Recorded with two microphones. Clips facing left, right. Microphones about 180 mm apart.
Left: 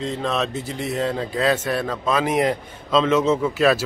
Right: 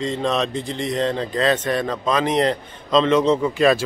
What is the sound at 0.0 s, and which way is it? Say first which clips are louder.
A man's voice: right 2 dB; centre (ahead or behind).